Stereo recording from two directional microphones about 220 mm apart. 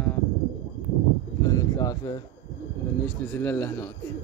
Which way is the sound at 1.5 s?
15° left (ahead or behind).